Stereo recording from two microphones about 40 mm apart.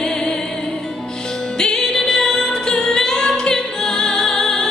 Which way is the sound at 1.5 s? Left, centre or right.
Centre.